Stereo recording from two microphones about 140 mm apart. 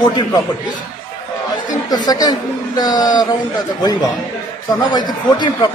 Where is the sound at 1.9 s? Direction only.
30° left (ahead or behind).